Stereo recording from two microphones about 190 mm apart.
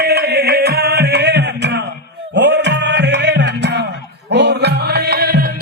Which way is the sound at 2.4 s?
65° right (ahead or behind).